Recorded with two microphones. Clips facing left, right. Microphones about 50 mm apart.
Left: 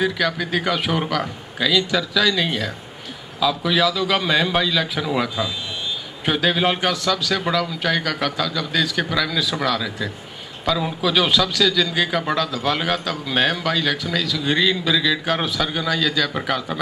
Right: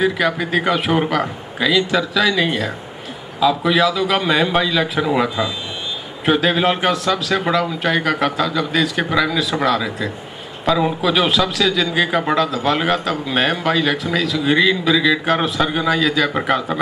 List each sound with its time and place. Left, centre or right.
0.3 s a man's voice: right
14.3 s a man's voice: centre